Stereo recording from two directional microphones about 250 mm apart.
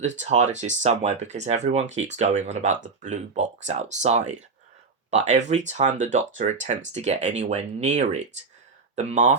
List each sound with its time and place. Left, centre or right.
0.2 s speech: right